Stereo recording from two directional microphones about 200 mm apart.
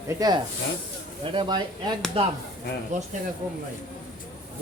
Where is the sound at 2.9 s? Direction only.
35° right (ahead or behind).